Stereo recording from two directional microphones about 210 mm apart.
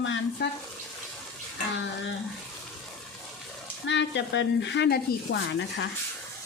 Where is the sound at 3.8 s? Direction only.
55° left (ahead or behind).